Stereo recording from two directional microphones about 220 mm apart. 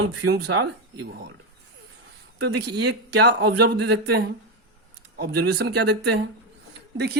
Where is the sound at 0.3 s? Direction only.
50° right (ahead or behind).